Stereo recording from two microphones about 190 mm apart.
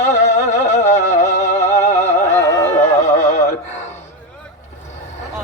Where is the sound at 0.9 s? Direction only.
40° left (ahead or behind).